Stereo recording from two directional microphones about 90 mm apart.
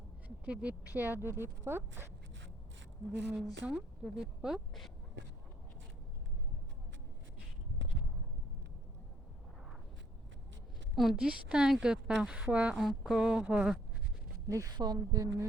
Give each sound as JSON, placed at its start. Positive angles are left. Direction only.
{"t": 0.4, "sound": "speech", "side_deg": -15}
{"t": 3.6, "sound": "a woman's voice", "side_deg": -15}
{"t": 10.9, "sound": "a woman's voice", "side_deg": 0}
{"t": 14.4, "sound": "a woman's voice", "side_deg": -35}